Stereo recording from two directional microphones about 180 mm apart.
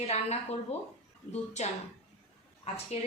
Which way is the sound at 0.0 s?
35° left (ahead or behind).